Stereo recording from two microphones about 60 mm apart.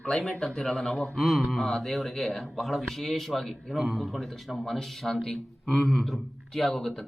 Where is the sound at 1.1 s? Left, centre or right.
Centre.